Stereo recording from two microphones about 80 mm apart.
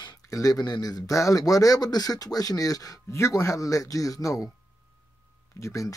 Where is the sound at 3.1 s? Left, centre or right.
Left.